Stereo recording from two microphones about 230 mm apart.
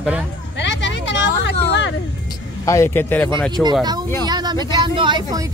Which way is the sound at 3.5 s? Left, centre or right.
Centre.